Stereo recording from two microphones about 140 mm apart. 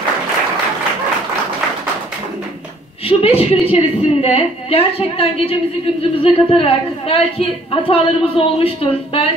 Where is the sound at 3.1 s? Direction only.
45° left (ahead or behind).